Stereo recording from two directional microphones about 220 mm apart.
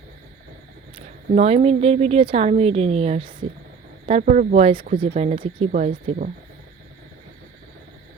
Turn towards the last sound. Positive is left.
turn(degrees=-35)  # may be behind; listen again after turning